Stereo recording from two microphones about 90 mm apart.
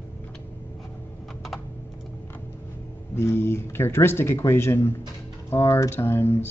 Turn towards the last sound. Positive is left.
turn(degrees=25)  # may be behind; listen again after turning